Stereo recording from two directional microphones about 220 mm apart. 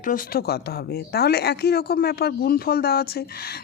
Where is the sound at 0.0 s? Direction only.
40° left (ahead or behind).